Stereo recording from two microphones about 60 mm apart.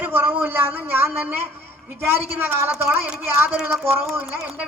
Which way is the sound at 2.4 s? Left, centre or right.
Right.